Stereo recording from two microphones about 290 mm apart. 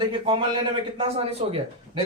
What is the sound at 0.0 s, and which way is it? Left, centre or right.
A man's voice, centre.